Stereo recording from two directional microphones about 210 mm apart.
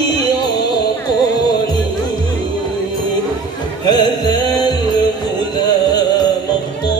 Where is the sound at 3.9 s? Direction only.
20° left (ahead or behind).